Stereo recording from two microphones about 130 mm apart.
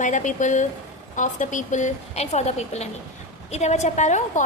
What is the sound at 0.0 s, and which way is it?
A woman's voice, 70° left (ahead or behind).